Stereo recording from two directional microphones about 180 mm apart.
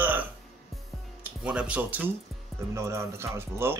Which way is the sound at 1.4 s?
5° right (ahead or behind).